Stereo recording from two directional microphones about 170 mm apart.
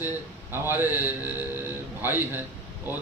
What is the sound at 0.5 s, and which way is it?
A man's voice, 15° right (ahead or behind).